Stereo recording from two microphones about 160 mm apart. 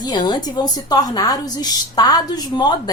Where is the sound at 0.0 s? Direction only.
25° left (ahead or behind).